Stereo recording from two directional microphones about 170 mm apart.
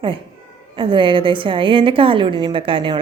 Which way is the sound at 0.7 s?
30° right (ahead or behind).